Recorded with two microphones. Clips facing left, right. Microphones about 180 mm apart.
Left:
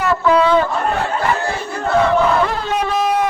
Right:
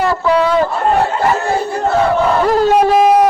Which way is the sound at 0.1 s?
35° right (ahead or behind).